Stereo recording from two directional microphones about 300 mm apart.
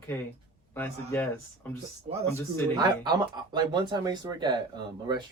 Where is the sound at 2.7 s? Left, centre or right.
Centre.